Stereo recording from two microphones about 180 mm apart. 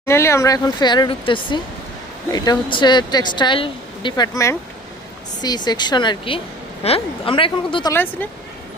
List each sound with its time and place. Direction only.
0.0 s a woman's voice: 15° left (ahead or behind)
7.9 s speech: 10° left (ahead or behind)